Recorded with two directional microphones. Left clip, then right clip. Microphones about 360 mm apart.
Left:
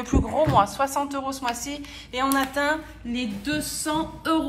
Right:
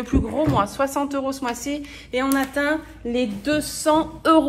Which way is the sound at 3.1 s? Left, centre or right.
Centre.